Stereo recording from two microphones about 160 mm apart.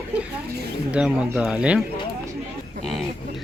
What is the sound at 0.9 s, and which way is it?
Speech, 5° right (ahead or behind).